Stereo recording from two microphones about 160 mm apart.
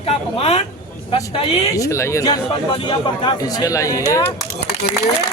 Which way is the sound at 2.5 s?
35° left (ahead or behind).